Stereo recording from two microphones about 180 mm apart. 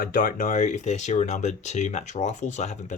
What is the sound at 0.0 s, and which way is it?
Speech, 50° left (ahead or behind).